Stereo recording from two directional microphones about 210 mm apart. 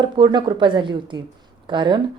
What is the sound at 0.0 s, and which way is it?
A woman's voice, 20° right (ahead or behind).